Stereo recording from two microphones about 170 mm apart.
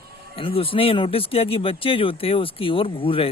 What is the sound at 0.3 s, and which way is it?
Speech, 35° left (ahead or behind).